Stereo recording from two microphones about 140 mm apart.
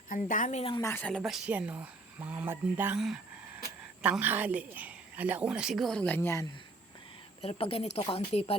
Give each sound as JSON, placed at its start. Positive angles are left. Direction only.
{"t": 0.1, "sound": "a woman's voice", "side_deg": 70}
{"t": 0.8, "sound": "speech", "side_deg": 20}
{"t": 1.0, "sound": "a woman's voice", "side_deg": 0}
{"t": 3.0, "sound": "a sound", "side_deg": 0}
{"t": 4.0, "sound": "a woman's voice", "side_deg": -10}
{"t": 7.4, "sound": "speech", "side_deg": 45}